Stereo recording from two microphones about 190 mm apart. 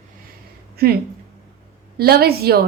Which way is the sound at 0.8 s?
55° right (ahead or behind).